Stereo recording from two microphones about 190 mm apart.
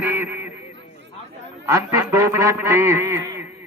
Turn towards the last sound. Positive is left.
turn(degrees=-15)  # may be behind; listen again after turning